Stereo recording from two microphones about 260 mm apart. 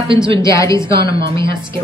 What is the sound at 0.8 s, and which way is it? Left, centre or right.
Speech, centre.